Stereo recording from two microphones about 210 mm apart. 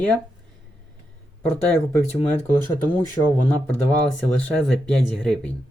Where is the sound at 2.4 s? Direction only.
10° left (ahead or behind).